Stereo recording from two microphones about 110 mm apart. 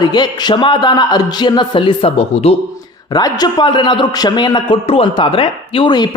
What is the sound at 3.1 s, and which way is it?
A man's voice, 40° left (ahead or behind).